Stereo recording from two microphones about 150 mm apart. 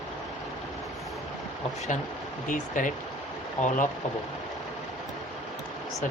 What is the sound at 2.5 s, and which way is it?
Speech, 60° left (ahead or behind).